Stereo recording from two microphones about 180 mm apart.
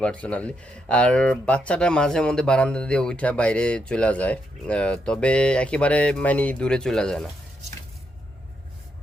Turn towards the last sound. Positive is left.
turn(degrees=5)  # may be behind; listen again after turning